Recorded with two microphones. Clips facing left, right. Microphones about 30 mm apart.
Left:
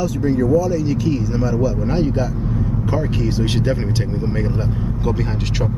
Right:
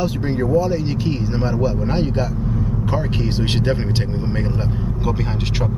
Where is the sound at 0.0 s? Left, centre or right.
Right.